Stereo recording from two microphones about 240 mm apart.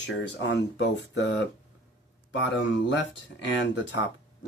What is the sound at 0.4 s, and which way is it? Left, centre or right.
Speech, left.